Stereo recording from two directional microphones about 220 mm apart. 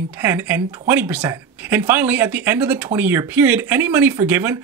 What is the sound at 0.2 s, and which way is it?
Speech, 10° right (ahead or behind).